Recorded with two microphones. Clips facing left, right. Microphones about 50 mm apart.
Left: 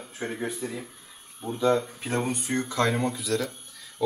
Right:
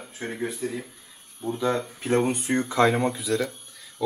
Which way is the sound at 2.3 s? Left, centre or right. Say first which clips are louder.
Right 3 dB; right.